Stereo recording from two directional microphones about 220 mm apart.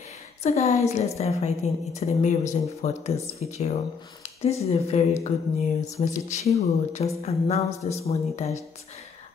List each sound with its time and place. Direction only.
0.4 s speech: 30° left (ahead or behind)